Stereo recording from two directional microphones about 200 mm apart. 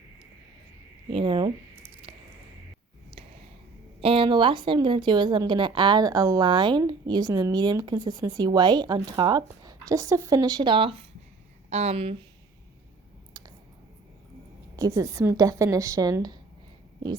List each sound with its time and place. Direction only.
1.1 s speech: 25° right (ahead or behind)
4.0 s a woman's voice: 25° right (ahead or behind)
14.8 s a woman's voice: 15° right (ahead or behind)